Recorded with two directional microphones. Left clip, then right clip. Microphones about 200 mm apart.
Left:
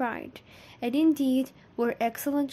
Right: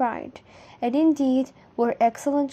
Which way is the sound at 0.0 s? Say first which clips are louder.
Right 6 dB; 5° left (ahead or behind).